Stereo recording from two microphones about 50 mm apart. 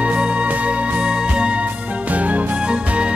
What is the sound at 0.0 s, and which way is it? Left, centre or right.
Music, right.